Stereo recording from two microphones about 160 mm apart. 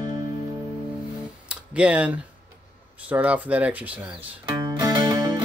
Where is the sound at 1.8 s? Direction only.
10° right (ahead or behind).